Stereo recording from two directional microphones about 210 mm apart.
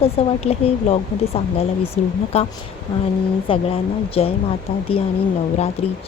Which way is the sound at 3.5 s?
25° left (ahead or behind).